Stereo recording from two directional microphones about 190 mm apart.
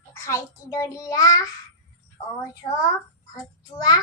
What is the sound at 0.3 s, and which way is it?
A child's voice, 15° left (ahead or behind).